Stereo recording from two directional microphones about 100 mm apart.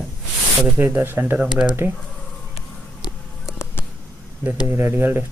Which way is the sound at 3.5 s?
25° left (ahead or behind).